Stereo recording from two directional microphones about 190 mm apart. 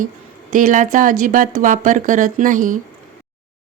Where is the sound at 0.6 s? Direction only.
45° right (ahead or behind).